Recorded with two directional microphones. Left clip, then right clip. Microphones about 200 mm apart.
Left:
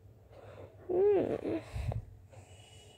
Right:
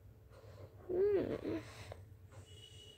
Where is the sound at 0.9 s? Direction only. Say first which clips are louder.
Left 6 dB; 5° left (ahead or behind).